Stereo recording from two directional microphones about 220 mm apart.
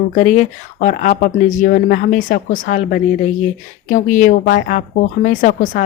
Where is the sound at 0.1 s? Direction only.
35° left (ahead or behind).